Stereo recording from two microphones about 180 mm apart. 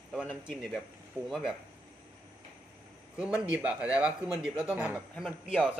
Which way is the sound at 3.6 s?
5° right (ahead or behind).